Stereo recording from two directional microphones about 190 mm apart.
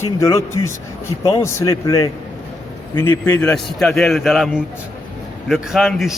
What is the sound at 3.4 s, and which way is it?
A man's voice, 5° left (ahead or behind).